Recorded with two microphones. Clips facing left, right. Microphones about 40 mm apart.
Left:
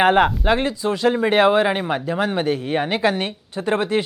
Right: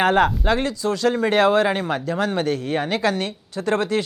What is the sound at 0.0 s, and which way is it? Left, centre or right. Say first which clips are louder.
Speech: left 2 dB; centre.